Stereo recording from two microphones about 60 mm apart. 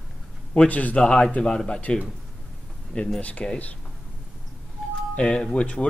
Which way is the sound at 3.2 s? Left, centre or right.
Left.